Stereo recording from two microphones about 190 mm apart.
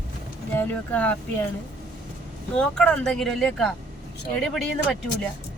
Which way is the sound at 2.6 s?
5° left (ahead or behind).